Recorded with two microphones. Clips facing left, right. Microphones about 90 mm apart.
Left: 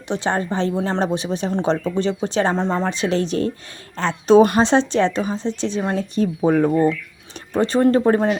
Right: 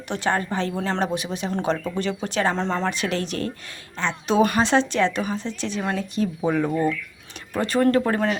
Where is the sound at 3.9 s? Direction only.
35° left (ahead or behind).